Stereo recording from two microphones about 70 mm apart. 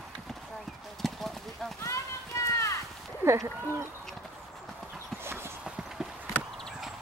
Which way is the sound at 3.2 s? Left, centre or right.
Right.